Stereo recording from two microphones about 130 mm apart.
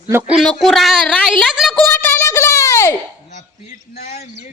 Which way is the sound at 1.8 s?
15° left (ahead or behind).